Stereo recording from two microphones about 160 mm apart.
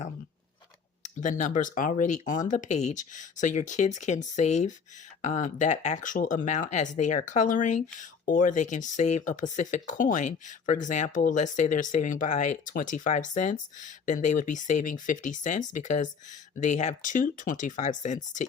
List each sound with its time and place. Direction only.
1.0 s speech: 50° left (ahead or behind)